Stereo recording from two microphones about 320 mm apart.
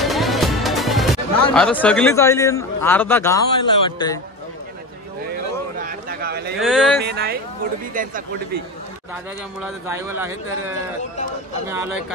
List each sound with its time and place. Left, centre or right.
0.0 s music: centre
1.5 s a man's voice: centre
5.3 s a sound: right
6.6 s speech: centre
7.0 s speech: right
9.6 s a man's voice: centre